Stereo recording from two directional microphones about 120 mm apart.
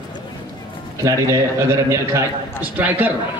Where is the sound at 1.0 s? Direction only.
20° right (ahead or behind).